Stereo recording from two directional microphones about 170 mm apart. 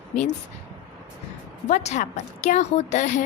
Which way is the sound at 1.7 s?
40° left (ahead or behind).